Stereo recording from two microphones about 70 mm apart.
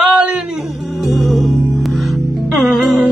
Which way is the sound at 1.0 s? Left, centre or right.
Centre.